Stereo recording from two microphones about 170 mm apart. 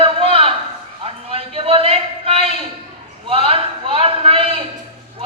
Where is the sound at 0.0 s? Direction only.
35° right (ahead or behind).